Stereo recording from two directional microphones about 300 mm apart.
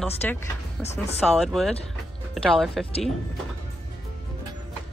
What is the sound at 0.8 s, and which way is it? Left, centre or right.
Speech, left.